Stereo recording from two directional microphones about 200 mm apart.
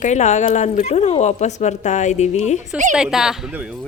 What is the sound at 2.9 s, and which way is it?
Speech, 5° right (ahead or behind).